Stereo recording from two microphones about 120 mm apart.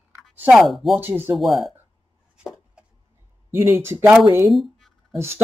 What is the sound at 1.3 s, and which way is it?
Speech, centre (ahead or behind).